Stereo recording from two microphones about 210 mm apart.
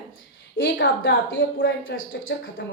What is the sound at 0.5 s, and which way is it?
A woman's voice, 55° left (ahead or behind).